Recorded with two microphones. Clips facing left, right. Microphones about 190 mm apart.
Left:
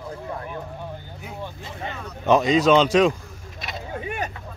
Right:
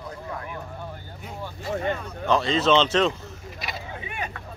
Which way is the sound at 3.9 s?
50° left (ahead or behind).